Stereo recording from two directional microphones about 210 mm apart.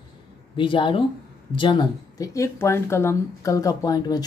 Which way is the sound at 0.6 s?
25° left (ahead or behind).